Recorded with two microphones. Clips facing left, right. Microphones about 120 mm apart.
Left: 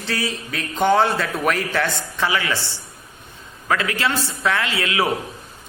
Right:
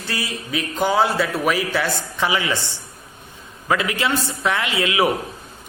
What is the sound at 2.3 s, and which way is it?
Speech, 20° right (ahead or behind).